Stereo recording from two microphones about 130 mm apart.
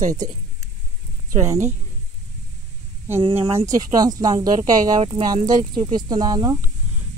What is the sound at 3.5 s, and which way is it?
Speech, 25° right (ahead or behind).